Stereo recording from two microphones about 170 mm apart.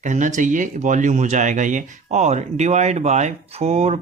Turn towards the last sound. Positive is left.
turn(degrees=-40)  # may be behind; listen again after turning